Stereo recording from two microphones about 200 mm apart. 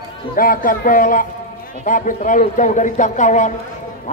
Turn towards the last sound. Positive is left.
turn(degrees=40)  # may be behind; listen again after turning